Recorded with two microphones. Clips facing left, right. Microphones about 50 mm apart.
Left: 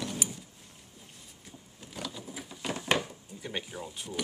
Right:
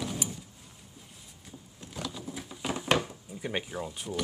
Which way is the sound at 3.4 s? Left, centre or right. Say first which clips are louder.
Right 4 dB; right.